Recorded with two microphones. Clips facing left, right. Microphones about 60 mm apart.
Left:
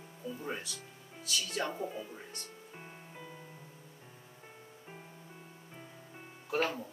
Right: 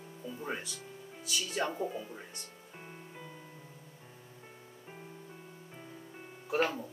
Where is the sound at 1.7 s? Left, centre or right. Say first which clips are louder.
Right 2 dB; centre.